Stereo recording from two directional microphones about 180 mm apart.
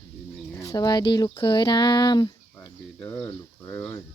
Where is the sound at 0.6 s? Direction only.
20° left (ahead or behind).